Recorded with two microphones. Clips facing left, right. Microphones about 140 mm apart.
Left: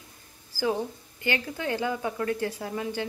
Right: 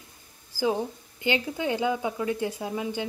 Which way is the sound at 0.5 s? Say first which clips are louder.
Right 1 dB; 20° right (ahead or behind).